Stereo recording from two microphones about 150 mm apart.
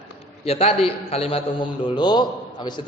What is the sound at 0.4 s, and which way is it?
A man's voice, 40° left (ahead or behind).